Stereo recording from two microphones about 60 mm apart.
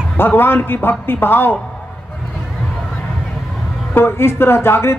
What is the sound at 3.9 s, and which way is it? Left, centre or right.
Speech, left.